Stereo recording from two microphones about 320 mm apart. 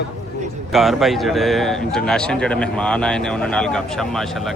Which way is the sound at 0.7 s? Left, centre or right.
Centre.